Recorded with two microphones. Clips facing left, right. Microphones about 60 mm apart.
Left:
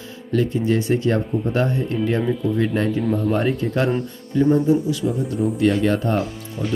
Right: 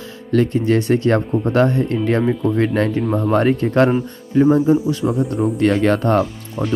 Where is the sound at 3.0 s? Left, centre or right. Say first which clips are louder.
Right 2 dB; centre.